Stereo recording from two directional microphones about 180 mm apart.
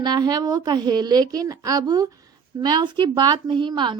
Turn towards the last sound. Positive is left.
turn(degrees=-25)  # may be behind; listen again after turning